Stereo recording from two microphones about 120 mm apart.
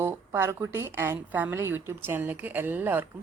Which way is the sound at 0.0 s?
20° right (ahead or behind).